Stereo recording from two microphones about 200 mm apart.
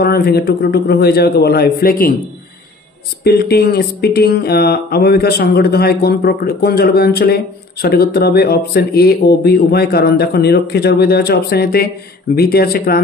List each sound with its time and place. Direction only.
0.0 s speech: 50° left (ahead or behind)
3.3 s speech: 50° left (ahead or behind)